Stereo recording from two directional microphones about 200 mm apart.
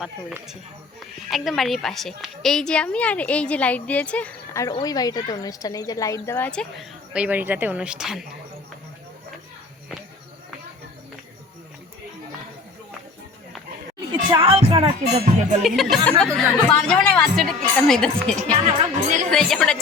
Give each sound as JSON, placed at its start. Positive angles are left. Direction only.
{"t": 0.0, "sound": "a woman's voice", "side_deg": 0}
{"t": 14.1, "sound": "speech", "side_deg": -20}
{"t": 15.6, "sound": "speech", "side_deg": 0}
{"t": 18.5, "sound": "a woman's voice", "side_deg": -35}
{"t": 19.3, "sound": "speech", "side_deg": 0}